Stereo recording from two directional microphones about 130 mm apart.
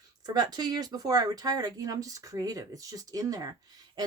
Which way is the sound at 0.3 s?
30° right (ahead or behind).